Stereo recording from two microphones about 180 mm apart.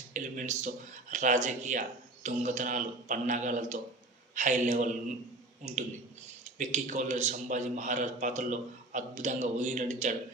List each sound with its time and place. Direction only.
0.1 s a man's voice: 45° right (ahead or behind)
6.4 s a man's voice: 40° right (ahead or behind)